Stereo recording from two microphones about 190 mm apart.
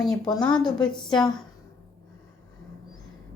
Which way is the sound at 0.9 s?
5° left (ahead or behind).